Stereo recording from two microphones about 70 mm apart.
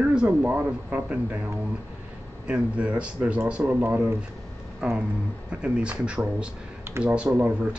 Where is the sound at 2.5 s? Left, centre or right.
Centre.